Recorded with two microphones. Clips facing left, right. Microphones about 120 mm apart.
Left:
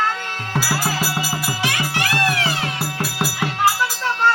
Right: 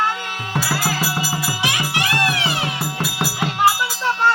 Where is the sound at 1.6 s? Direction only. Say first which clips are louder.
Even; 15° right (ahead or behind).